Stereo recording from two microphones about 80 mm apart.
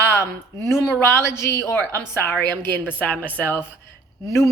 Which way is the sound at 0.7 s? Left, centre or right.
Left.